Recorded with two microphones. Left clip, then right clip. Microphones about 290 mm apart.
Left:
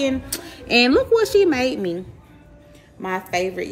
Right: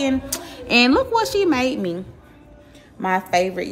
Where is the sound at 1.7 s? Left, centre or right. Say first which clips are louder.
Even; centre.